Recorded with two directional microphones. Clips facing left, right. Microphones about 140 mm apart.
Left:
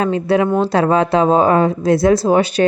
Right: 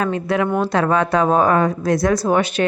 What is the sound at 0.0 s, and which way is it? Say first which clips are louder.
A woman's voice: left 4 dB; 30° left (ahead or behind).